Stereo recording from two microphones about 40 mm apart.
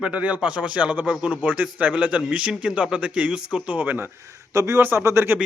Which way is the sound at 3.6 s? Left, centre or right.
Right.